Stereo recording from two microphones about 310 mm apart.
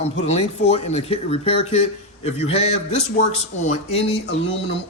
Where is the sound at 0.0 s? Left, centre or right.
Centre.